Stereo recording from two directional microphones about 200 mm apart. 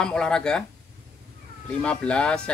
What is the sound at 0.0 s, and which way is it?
Speech, 5° left (ahead or behind).